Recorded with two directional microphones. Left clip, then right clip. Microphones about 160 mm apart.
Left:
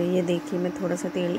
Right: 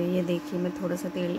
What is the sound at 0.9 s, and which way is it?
Speech, centre (ahead or behind).